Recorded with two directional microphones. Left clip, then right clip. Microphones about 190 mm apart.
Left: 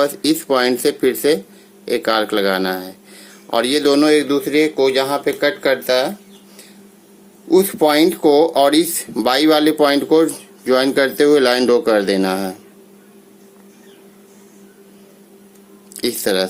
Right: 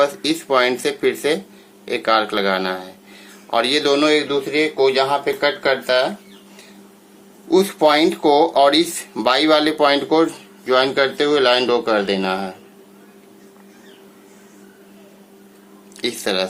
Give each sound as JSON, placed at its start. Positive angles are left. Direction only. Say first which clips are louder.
{"t": 0.0, "sound": "speech", "louder": "left 1 dB", "side_deg": 30}
{"t": 7.5, "sound": "speech", "louder": "left 1 dB", "side_deg": 30}
{"t": 16.0, "sound": "speech", "louder": "left 3 dB", "side_deg": 30}